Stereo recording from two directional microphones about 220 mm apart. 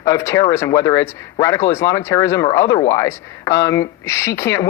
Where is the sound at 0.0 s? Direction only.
15° left (ahead or behind).